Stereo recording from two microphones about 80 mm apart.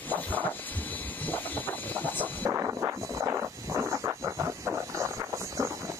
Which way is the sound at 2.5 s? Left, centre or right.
Right.